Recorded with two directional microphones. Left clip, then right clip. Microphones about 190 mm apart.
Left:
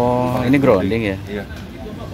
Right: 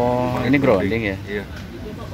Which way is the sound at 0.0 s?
15° left (ahead or behind).